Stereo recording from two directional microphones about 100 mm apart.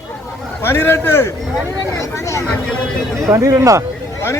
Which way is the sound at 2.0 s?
30° left (ahead or behind).